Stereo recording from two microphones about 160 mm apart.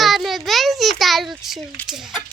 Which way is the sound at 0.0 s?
Centre (ahead or behind).